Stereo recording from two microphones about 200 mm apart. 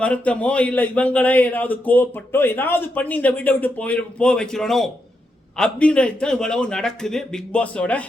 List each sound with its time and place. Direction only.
0.0 s a man's voice: 5° left (ahead or behind)